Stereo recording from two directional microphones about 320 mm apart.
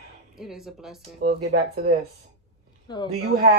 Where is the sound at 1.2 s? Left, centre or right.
Right.